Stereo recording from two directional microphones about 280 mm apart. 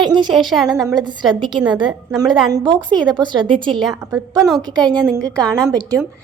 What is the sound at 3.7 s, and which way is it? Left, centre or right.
Speech, centre.